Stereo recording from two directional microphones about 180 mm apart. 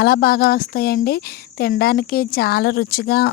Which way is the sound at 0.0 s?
60° left (ahead or behind).